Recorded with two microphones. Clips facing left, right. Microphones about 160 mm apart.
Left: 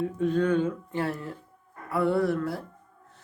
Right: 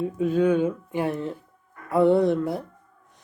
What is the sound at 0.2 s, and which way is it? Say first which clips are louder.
Speech: right 4 dB; 10° right (ahead or behind).